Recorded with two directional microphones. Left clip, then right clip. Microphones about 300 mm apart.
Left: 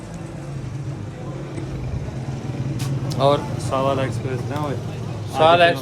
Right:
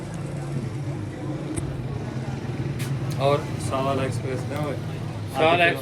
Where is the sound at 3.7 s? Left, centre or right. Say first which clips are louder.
Left 4 dB; left.